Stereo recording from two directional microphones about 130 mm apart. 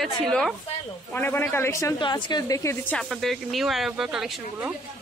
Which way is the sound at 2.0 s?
35° left (ahead or behind).